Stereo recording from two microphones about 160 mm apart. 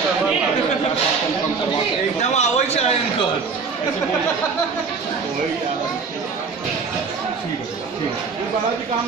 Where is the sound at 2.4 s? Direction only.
40° left (ahead or behind).